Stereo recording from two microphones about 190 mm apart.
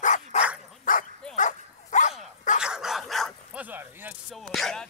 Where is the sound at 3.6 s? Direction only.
10° right (ahead or behind).